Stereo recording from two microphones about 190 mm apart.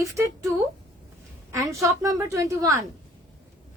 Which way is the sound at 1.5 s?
15° right (ahead or behind).